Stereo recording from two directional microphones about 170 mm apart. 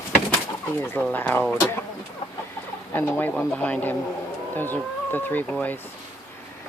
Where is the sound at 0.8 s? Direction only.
10° left (ahead or behind).